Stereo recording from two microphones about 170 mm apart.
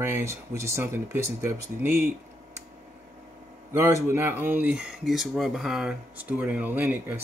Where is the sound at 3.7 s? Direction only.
15° right (ahead or behind).